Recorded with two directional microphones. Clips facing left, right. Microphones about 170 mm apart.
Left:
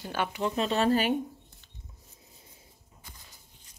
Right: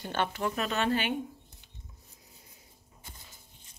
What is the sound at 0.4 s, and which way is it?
Speech, 25° left (ahead or behind).